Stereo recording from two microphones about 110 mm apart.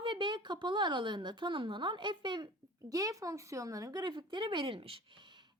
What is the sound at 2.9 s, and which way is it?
Speech, 35° right (ahead or behind).